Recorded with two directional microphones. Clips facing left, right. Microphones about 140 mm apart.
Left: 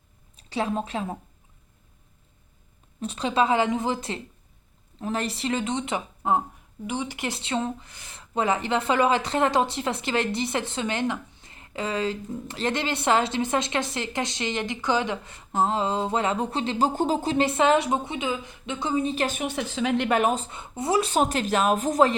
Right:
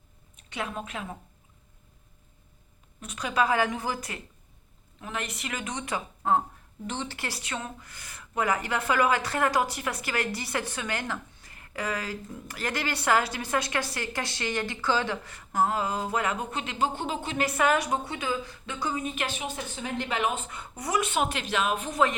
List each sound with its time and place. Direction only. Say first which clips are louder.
0.3 s a woman's voice: left 7 dB; 30° left (ahead or behind)
3.0 s speech: left 4 dB; 30° left (ahead or behind)
19.3 s a woman's voice: left 6 dB; 65° left (ahead or behind); by 20.1 s 90° left
20.1 s speech: left 6 dB; 45° left (ahead or behind)
20.5 s speech: left 5 dB; 25° left (ahead or behind); by 22.1 s 40° left (ahead or behind)